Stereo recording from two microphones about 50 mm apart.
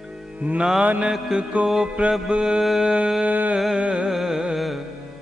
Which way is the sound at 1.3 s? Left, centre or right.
Centre.